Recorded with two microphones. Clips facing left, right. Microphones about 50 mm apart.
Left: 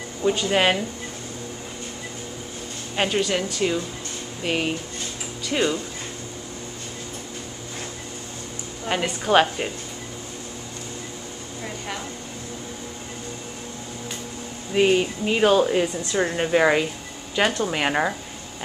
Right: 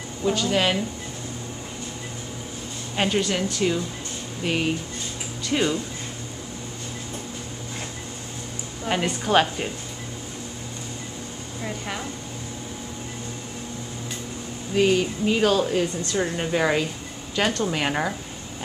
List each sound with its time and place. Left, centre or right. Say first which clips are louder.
0.3 s speech: left 2 dB; left
3.0 s a woman's voice: left 1 dB; centre
8.8 s a woman's voice: even; centre
14.7 s a woman's voice: left 1 dB; left